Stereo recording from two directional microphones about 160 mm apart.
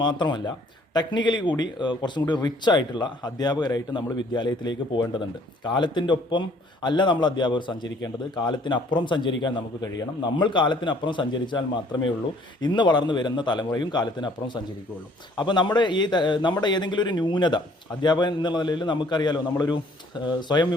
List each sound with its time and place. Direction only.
0.0 s a man's voice: 30° left (ahead or behind)